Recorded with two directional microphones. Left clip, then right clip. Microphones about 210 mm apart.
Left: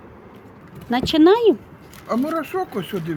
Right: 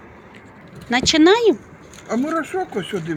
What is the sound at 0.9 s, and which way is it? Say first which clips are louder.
Speech: right 1 dB; 10° left (ahead or behind).